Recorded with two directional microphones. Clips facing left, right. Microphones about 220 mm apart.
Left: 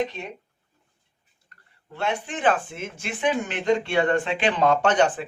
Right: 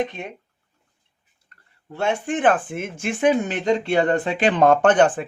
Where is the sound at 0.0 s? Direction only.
55° right (ahead or behind).